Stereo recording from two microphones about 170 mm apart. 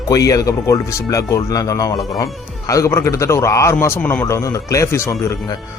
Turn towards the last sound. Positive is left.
turn(degrees=15)  # may be behind; listen again after turning